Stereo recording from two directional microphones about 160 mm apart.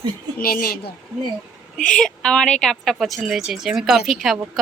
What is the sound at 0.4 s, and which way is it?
Speech, 65° left (ahead or behind).